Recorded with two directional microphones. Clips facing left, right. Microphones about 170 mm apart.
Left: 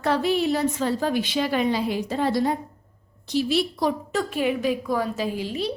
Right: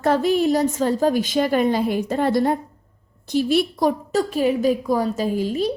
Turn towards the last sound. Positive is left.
turn(degrees=-45)  # may be behind; listen again after turning